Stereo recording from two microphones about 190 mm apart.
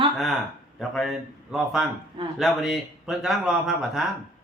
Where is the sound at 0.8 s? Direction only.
Centre (ahead or behind).